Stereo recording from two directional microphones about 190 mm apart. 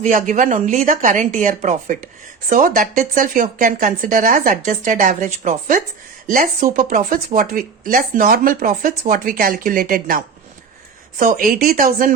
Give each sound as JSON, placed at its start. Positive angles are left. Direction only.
{"t": 0.0, "sound": "speech", "side_deg": -40}